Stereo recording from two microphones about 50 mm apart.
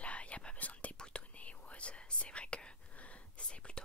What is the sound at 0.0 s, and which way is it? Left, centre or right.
Whispering, left.